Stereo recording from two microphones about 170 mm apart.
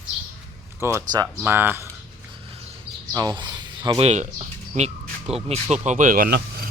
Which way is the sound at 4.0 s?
40° right (ahead or behind).